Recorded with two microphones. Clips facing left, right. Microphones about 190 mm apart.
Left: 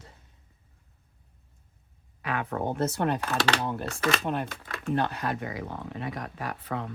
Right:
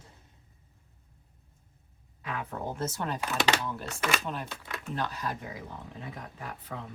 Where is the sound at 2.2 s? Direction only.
75° left (ahead or behind).